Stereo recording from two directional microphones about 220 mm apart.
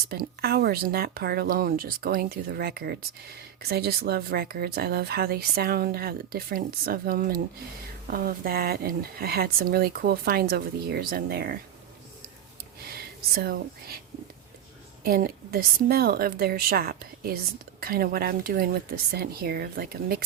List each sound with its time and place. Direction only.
0.1 s speech: 45° right (ahead or behind)
12.9 s speech: 45° right (ahead or behind)
15.0 s speech: 40° right (ahead or behind)